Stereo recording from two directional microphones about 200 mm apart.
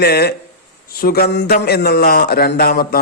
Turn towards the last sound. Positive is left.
turn(degrees=50)  # may be behind; listen again after turning